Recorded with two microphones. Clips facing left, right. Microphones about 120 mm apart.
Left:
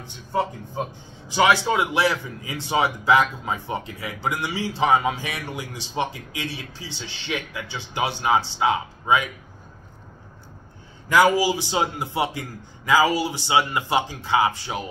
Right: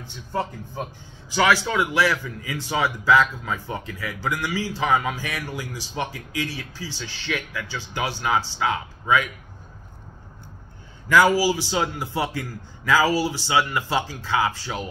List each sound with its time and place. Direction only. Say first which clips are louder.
0.3 s a man's voice: left 3 dB; 20° left (ahead or behind)
11.1 s a man's voice: even; 20° left (ahead or behind)